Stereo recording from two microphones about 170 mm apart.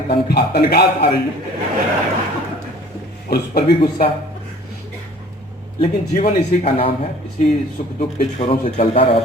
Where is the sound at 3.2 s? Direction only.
60° left (ahead or behind).